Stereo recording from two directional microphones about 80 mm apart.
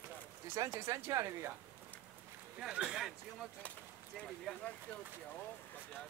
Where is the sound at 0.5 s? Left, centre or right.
Right.